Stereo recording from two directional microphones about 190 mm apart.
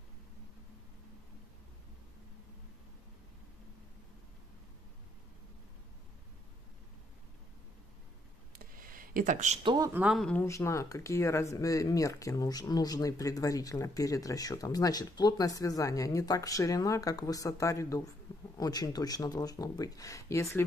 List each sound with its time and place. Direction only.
8.5 s a sound: 45° right (ahead or behind)
9.6 s speech: 25° right (ahead or behind)
9.9 s speech: centre (ahead or behind)
10.4 s speech: 15° left (ahead or behind)